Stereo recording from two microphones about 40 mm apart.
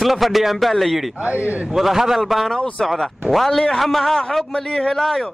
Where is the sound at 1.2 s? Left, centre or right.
Right.